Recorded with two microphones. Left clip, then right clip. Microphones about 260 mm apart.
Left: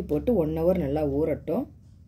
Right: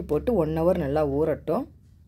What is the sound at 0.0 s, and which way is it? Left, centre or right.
Speech, right.